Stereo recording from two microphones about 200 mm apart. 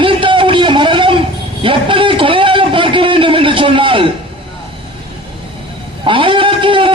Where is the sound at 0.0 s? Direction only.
25° right (ahead or behind).